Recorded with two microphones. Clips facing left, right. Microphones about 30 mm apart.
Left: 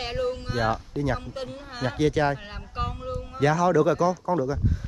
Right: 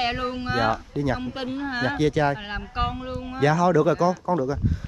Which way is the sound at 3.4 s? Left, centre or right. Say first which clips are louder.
Right 1 dB; right.